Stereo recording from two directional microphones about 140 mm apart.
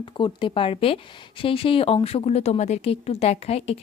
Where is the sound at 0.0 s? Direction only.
35° left (ahead or behind).